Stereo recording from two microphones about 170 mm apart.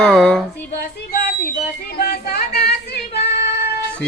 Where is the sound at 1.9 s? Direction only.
70° left (ahead or behind).